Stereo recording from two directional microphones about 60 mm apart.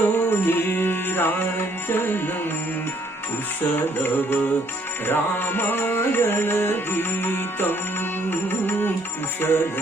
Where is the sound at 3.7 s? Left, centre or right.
Left.